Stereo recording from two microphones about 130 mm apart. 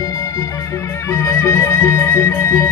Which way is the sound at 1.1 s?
20° left (ahead or behind).